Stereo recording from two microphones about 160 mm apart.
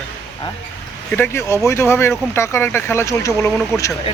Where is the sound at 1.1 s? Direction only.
15° left (ahead or behind).